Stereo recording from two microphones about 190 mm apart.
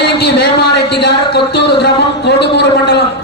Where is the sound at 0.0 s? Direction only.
60° left (ahead or behind).